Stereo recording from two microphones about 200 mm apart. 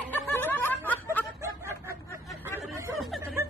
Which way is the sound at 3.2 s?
10° right (ahead or behind).